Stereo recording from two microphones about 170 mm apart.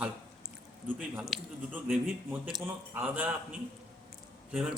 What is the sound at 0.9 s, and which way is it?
A man's voice, 5° right (ahead or behind).